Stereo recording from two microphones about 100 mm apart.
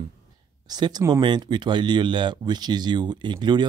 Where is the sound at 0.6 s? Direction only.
45° right (ahead or behind).